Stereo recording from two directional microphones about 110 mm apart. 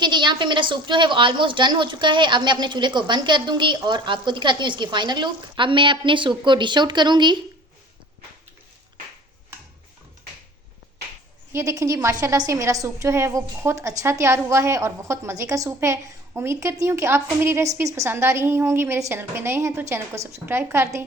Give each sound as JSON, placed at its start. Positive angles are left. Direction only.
{"t": 0.0, "sound": "a woman's voice", "side_deg": -40}
{"t": 11.5, "sound": "a woman's voice", "side_deg": -30}